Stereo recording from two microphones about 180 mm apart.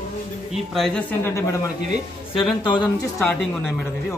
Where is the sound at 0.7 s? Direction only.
5° left (ahead or behind).